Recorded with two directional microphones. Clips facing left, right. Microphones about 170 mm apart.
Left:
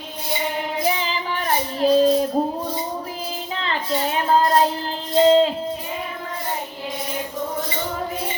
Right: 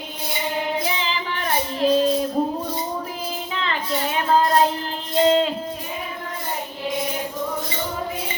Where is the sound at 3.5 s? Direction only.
35° left (ahead or behind).